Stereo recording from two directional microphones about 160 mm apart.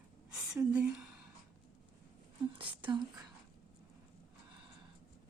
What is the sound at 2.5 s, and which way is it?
Speech, 30° right (ahead or behind).